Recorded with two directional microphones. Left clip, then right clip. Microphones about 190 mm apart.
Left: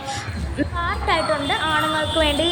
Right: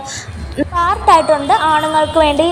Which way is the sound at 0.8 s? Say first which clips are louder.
Right 12 dB; 20° right (ahead or behind).